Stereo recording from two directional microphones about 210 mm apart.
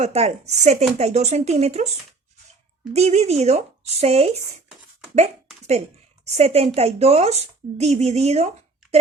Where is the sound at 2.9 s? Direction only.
30° right (ahead or behind).